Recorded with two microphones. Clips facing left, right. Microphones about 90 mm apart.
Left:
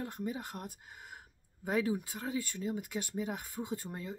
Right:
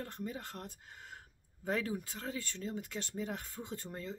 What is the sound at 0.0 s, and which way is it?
Speech, 15° left (ahead or behind).